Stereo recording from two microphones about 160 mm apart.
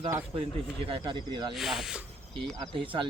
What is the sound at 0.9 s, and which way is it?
Speech, 30° right (ahead or behind).